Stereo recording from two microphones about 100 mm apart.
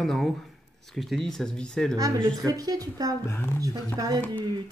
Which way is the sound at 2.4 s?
40° right (ahead or behind).